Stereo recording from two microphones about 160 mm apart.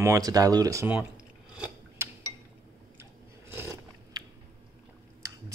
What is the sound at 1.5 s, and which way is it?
Scissors, 10° right (ahead or behind).